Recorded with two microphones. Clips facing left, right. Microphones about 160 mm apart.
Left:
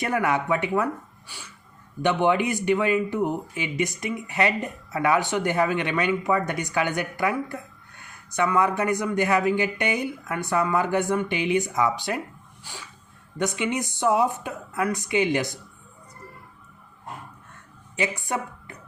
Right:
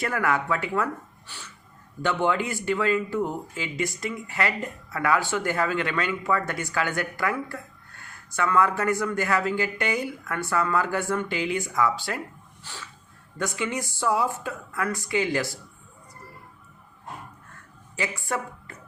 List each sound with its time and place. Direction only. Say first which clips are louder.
0.0 s speech: left 2 dB; 20° left (ahead or behind)
1.3 s music: even; 10° left (ahead or behind)
2.0 s speech: left 3 dB; 20° left (ahead or behind)
12.7 s music: left 1 dB; 10° left (ahead or behind)
13.4 s speech: left 3 dB; 20° left (ahead or behind)
17.9 s speech: left 2 dB; 20° left (ahead or behind)